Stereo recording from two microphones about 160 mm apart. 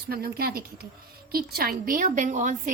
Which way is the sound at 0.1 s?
70° right (ahead or behind).